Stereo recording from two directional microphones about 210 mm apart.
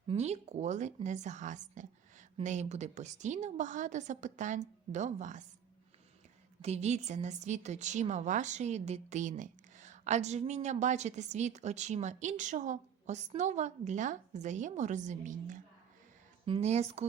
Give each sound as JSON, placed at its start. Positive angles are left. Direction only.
{"t": 0.1, "sound": "a woman's voice", "side_deg": -30}
{"t": 6.6, "sound": "a woman's voice", "side_deg": -30}